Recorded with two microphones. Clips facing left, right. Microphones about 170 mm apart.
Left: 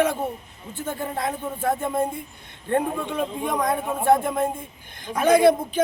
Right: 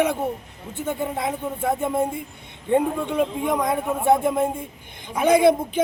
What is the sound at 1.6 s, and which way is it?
A man's voice, 5° right (ahead or behind).